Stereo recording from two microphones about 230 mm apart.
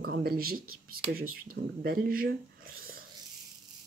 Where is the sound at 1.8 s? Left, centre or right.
Right.